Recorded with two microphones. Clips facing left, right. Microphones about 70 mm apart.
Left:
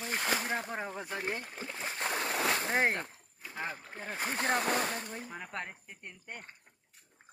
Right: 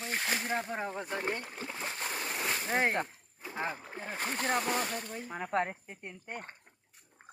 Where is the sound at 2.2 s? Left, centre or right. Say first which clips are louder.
Left 4 dB; left.